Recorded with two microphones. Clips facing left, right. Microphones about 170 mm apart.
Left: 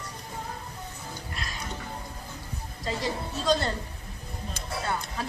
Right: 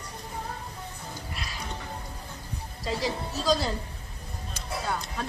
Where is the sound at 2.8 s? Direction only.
Centre (ahead or behind).